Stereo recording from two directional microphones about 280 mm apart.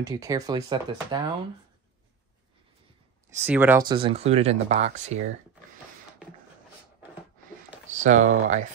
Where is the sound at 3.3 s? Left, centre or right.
Centre; by 5.2 s right.